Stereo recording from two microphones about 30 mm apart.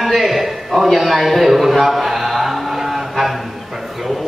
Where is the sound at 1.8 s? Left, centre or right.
Centre.